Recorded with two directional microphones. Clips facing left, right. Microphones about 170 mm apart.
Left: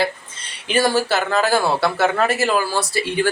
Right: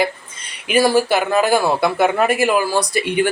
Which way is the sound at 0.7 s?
10° right (ahead or behind).